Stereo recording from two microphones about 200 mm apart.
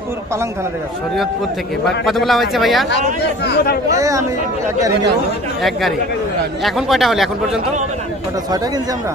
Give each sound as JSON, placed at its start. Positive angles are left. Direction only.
{"t": 2.0, "sound": "speech", "side_deg": 0}
{"t": 3.4, "sound": "speech", "side_deg": 55}
{"t": 3.9, "sound": "speech", "side_deg": -15}
{"t": 5.6, "sound": "speech", "side_deg": 0}